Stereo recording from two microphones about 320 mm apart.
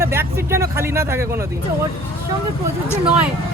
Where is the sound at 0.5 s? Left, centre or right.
Centre.